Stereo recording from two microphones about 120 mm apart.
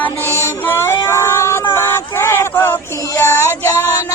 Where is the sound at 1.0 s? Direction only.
25° left (ahead or behind).